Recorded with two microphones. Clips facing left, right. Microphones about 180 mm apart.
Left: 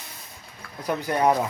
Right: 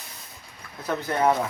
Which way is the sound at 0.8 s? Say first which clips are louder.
Left 1 dB; 15° left (ahead or behind).